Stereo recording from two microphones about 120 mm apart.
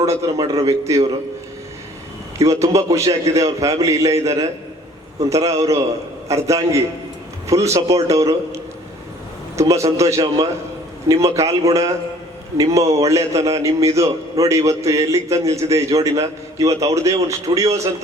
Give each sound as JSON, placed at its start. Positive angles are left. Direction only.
{"t": 0.0, "sound": "a man's voice", "side_deg": -25}
{"t": 2.4, "sound": "a man's voice", "side_deg": -25}